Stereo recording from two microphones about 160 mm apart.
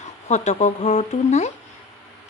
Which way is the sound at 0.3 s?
45° left (ahead or behind).